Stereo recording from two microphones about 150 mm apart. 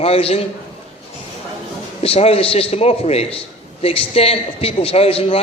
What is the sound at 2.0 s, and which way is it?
A man's voice, 40° left (ahead or behind).